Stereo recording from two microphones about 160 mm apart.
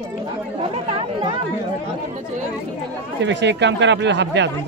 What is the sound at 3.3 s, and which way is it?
Speech, 90° right.